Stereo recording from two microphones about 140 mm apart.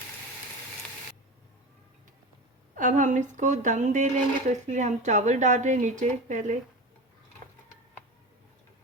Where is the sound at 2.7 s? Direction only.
70° right (ahead or behind).